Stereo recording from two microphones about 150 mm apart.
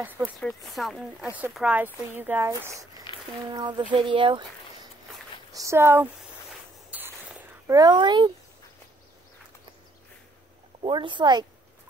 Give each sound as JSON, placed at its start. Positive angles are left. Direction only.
{"t": 0.4, "sound": "a woman's voice", "side_deg": 0}
{"t": 5.5, "sound": "speech", "side_deg": -20}
{"t": 6.9, "sound": "a sound", "side_deg": -10}
{"t": 7.7, "sound": "a woman's voice", "side_deg": -30}
{"t": 10.8, "sound": "a woman's voice", "side_deg": -35}